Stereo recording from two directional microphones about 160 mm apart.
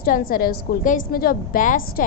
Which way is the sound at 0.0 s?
65° left (ahead or behind).